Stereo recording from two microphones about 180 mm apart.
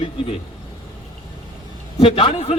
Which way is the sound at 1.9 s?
30° left (ahead or behind).